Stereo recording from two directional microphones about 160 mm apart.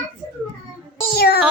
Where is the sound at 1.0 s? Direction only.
75° left (ahead or behind).